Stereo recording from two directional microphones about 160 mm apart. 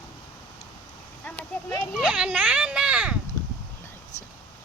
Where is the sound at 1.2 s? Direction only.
10° left (ahead or behind).